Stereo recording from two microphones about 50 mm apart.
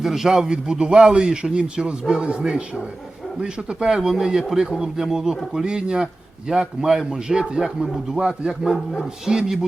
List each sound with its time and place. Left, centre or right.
0.0 s a man's voice: centre